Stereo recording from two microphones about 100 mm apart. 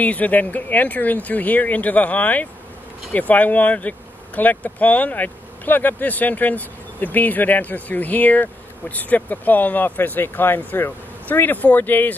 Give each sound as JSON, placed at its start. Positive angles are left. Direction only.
{"t": 0.0, "sound": "speech", "side_deg": 15}